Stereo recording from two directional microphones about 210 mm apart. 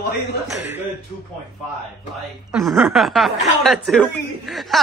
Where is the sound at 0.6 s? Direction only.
10° right (ahead or behind).